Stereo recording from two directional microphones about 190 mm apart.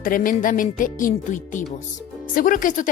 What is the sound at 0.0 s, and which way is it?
A woman's voice, 45° left (ahead or behind).